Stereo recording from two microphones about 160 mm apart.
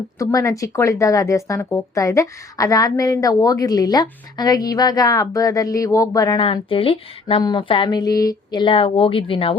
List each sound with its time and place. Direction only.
0.2 s a woman's voice: 20° left (ahead or behind)
6.4 s speech: 35° left (ahead or behind)